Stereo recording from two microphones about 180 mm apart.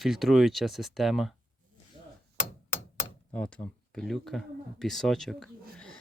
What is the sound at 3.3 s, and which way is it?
Speech, 5° left (ahead or behind).